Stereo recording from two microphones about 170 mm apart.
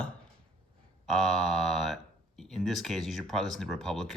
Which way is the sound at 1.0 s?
Centre (ahead or behind).